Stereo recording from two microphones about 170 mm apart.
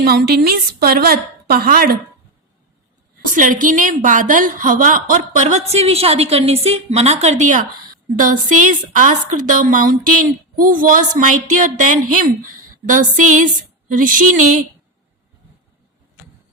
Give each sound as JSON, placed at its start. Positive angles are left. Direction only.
{"t": 0.0, "sound": "a woman's voice", "side_deg": -70}
{"t": 3.3, "sound": "a woman's voice", "side_deg": -50}